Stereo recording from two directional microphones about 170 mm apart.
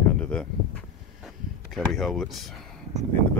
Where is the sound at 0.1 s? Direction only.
5° left (ahead or behind).